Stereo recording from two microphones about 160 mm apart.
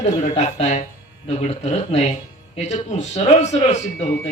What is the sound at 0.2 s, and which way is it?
Speech, 45° left (ahead or behind).